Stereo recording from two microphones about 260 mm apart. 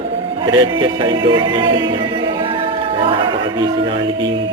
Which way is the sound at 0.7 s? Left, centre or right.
Centre.